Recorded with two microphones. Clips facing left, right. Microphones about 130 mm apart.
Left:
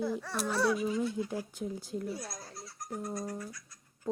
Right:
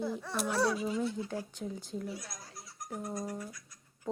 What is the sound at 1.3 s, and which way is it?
Speech, 10° left (ahead or behind).